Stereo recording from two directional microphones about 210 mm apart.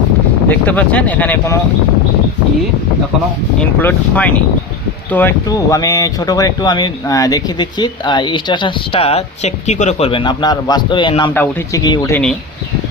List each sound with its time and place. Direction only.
0.4 s speech: 10° left (ahead or behind)
3.6 s speech: 10° left (ahead or behind)
12.1 s speech: 5° left (ahead or behind)